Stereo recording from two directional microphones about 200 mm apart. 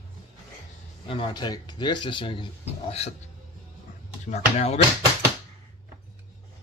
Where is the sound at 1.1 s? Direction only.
20° left (ahead or behind).